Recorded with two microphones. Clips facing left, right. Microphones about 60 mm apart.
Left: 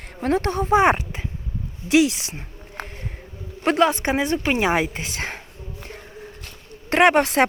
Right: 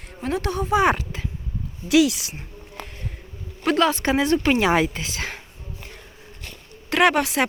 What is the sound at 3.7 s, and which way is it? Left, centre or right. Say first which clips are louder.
Speech: even; left.